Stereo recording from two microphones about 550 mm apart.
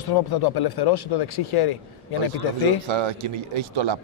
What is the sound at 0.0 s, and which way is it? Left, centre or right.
Speech, left.